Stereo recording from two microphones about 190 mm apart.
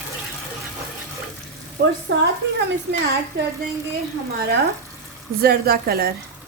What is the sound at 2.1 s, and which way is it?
Speech, 65° right (ahead or behind).